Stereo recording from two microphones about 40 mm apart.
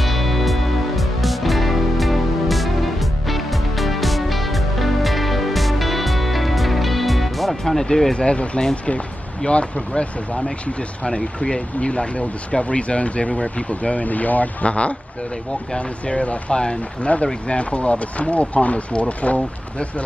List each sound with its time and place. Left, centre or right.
0.0 s music: centre
7.8 s speech: centre
9.4 s speech: left
16.1 s speech: left